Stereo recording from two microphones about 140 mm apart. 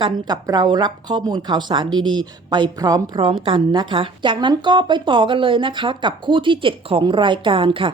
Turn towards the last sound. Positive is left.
turn(degrees=-40)  # may be behind; listen again after turning